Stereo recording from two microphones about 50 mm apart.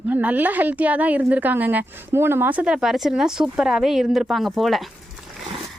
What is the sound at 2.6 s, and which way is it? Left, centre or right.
Speech, centre.